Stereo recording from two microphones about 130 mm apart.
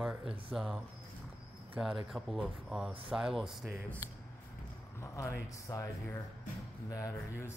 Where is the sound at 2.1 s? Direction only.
Centre (ahead or behind).